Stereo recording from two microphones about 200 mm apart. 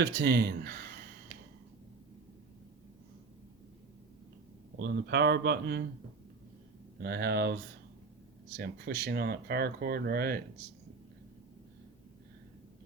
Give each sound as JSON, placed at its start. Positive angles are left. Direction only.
{"t": 0.0, "sound": "speech", "side_deg": -50}
{"t": 4.8, "sound": "speech", "side_deg": -55}
{"t": 7.0, "sound": "speech", "side_deg": -50}